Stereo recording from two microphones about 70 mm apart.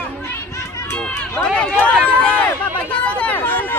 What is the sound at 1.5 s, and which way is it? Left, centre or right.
Speech, centre.